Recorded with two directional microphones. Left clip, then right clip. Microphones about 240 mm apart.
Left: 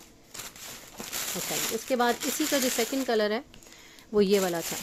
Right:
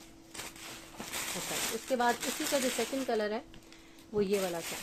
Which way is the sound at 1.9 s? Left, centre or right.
Left.